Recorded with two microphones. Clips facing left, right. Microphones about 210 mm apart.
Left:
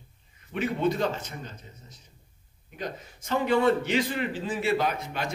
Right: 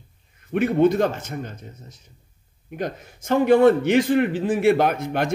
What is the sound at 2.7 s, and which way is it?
A man's voice, 55° right (ahead or behind).